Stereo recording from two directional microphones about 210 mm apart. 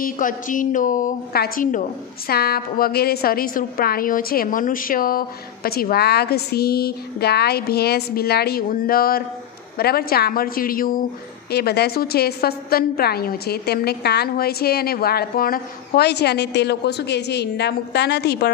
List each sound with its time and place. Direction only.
0.0 s a woman's voice: 40° left (ahead or behind)